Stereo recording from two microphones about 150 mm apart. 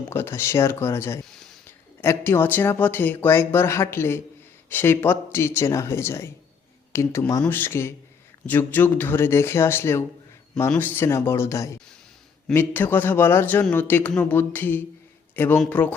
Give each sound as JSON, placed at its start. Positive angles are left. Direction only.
{"t": 0.1, "sound": "speech", "side_deg": 15}
{"t": 1.2, "sound": "a sound", "side_deg": 5}
{"t": 2.0, "sound": "speech", "side_deg": 15}